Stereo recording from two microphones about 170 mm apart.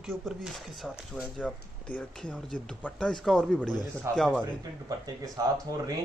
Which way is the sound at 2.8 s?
5° left (ahead or behind).